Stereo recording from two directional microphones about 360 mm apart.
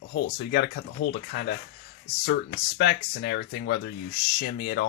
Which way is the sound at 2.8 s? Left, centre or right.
Left.